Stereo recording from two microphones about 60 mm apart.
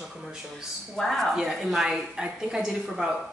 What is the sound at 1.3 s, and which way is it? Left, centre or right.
A woman's voice, centre.